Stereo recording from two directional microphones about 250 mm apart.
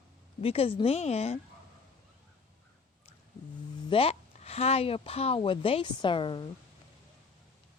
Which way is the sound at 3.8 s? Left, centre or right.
Left.